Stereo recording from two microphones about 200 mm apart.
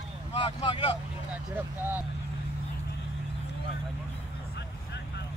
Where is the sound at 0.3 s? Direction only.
30° left (ahead or behind).